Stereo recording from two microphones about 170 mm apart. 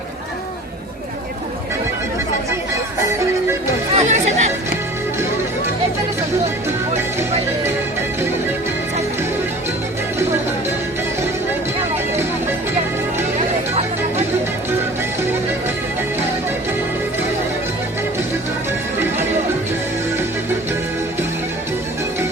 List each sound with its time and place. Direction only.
3.9 s chatter: 40° right (ahead or behind)
7.2 s music: 15° right (ahead or behind)